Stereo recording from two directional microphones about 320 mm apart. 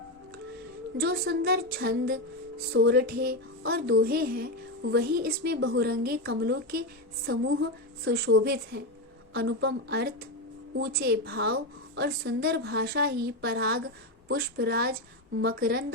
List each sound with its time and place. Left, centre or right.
0.9 s a woman's voice: right